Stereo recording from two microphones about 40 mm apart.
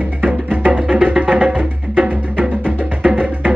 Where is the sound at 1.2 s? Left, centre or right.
Right.